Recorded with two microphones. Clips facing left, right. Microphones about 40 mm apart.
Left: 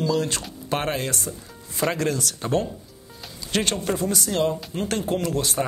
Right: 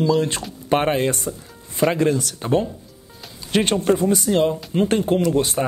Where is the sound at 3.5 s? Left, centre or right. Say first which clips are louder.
Right 6 dB; right.